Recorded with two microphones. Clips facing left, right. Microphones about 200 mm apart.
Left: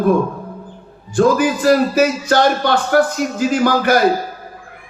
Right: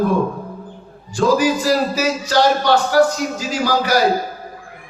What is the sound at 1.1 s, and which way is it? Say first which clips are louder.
Speech: left 2 dB; 55° left (ahead or behind).